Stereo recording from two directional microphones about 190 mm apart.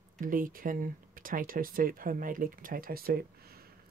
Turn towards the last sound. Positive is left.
turn(degrees=-55)  # may be behind; listen again after turning